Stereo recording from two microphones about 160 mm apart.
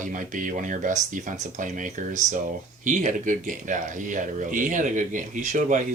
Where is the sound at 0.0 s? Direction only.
55° right (ahead or behind).